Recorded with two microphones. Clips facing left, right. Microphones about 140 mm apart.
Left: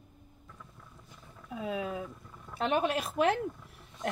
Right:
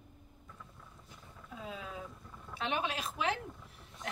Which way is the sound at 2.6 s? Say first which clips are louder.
Left 7 dB; 45° left (ahead or behind).